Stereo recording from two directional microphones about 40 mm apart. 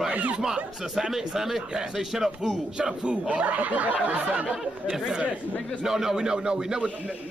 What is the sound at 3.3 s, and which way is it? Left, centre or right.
Speech, right.